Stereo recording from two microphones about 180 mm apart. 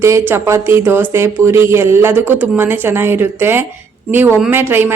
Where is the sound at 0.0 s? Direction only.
15° right (ahead or behind).